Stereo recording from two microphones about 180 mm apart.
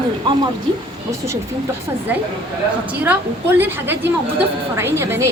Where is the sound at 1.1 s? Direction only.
15° right (ahead or behind).